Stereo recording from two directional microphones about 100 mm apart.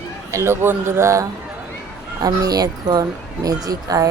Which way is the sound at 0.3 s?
30° right (ahead or behind).